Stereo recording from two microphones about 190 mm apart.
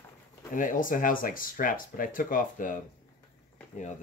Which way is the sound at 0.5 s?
45° left (ahead or behind).